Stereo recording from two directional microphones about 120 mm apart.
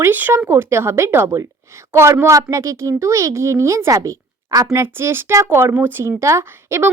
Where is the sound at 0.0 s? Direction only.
15° right (ahead or behind).